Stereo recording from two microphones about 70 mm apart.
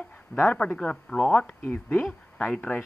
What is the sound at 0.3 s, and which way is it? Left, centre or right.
Speech, left.